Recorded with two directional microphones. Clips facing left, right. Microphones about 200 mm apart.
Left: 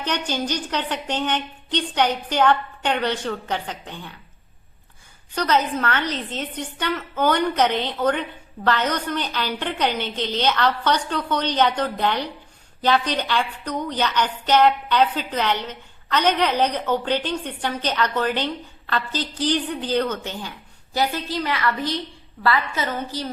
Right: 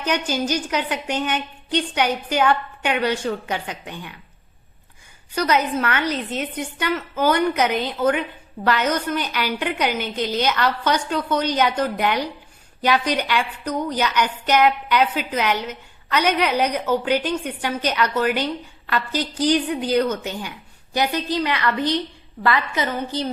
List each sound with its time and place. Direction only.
0.0 s a woman's voice: 10° right (ahead or behind)
5.3 s a woman's voice: 10° right (ahead or behind)